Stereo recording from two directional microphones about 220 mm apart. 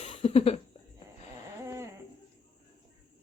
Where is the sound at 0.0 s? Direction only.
25° left (ahead or behind).